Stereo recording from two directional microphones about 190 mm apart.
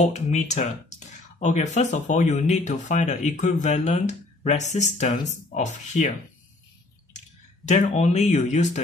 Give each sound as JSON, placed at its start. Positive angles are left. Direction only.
{"t": 0.0, "sound": "speech", "side_deg": 35}
{"t": 7.2, "sound": "speech", "side_deg": 40}